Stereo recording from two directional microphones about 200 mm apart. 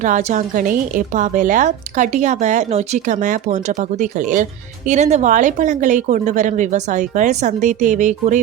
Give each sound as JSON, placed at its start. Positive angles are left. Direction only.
{"t": 0.0, "sound": "a woman's voice", "side_deg": -35}